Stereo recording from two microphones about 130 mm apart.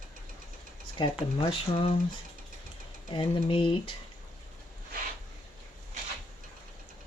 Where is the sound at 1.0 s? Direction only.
40° left (ahead or behind).